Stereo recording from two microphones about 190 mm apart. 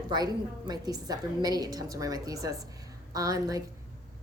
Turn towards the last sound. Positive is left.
turn(degrees=-20)  # may be behind; listen again after turning